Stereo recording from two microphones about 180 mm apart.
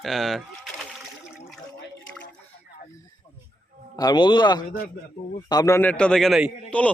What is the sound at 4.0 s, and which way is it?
A man's voice, 25° left (ahead or behind).